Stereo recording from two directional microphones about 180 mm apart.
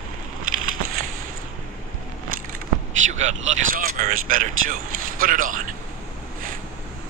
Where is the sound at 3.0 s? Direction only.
40° right (ahead or behind).